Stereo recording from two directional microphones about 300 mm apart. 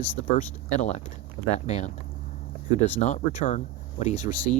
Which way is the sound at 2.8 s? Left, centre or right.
Centre.